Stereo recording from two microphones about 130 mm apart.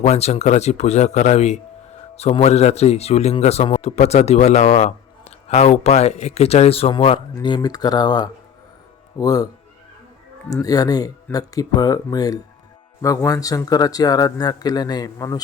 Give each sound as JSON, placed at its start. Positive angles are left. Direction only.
{"t": 0.0, "sound": "a man's voice", "side_deg": 55}
{"t": 7.4, "sound": "speech", "side_deg": 35}
{"t": 10.5, "sound": "speech", "side_deg": 30}